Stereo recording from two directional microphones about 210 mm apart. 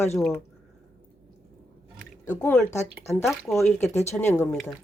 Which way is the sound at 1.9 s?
10° left (ahead or behind).